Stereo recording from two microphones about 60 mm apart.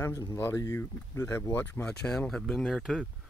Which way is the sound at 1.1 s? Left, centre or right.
Left.